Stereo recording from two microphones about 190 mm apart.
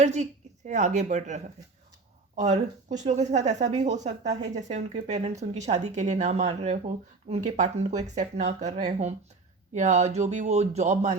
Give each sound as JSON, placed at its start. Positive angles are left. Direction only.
{"t": 0.0, "sound": "a woman's voice", "side_deg": -40}